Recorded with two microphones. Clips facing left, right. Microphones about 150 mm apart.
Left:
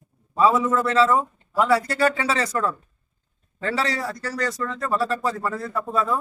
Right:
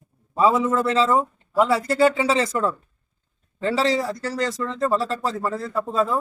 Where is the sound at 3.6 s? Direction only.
25° right (ahead or behind).